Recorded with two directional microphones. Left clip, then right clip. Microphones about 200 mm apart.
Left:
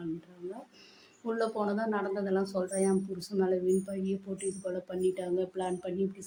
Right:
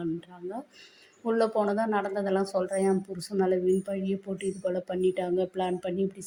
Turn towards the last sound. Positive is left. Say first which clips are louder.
# right 4 dB
turn(degrees=-20)  # may be behind; listen again after turning